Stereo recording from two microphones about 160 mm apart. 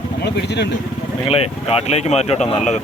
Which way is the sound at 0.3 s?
90° left.